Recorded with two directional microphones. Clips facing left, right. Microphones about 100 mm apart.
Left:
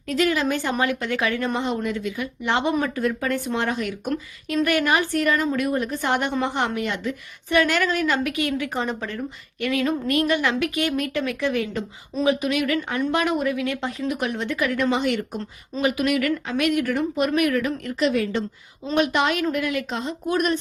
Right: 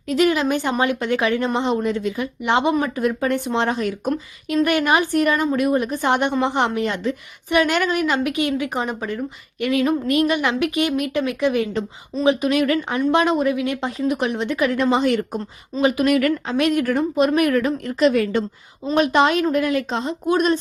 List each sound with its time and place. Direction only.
0.1 s a woman's voice: 20° right (ahead or behind)
2.4 s a woman's voice: 15° right (ahead or behind); by 4.1 s 35° right (ahead or behind)
4.5 s a woman's voice: 25° right (ahead or behind)
6.8 s a woman's voice: 35° right (ahead or behind)
7.5 s a woman's voice: 20° right (ahead or behind)
9.6 s a woman's voice: 25° right (ahead or behind)
12.5 s a woman's voice: 35° right (ahead or behind)
12.9 s a woman's voice: 20° right (ahead or behind)
18.1 s a woman's voice: 55° right (ahead or behind)
18.9 s a woman's voice: 35° right (ahead or behind)